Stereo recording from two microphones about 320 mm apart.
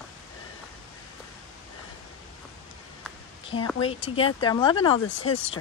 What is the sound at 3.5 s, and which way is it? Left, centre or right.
Speech, left.